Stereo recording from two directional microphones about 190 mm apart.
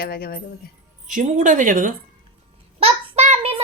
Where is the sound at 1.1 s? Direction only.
45° right (ahead or behind).